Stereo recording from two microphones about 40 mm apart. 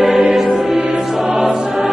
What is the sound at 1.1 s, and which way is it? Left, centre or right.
Choir, centre.